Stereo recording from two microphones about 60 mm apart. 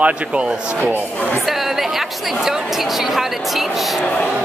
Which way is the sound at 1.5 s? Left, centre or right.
Centre.